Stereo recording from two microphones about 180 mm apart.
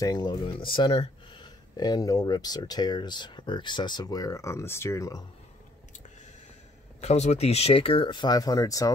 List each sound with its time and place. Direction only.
0.0 s speech: 20° left (ahead or behind)
7.0 s speech: 40° left (ahead or behind); by 8.9 s 20° left (ahead or behind)